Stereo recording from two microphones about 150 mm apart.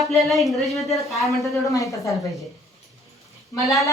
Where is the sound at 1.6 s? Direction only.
20° left (ahead or behind).